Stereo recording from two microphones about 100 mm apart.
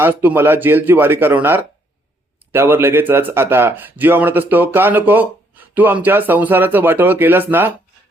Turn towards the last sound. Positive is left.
turn(degrees=-20)  # may be behind; listen again after turning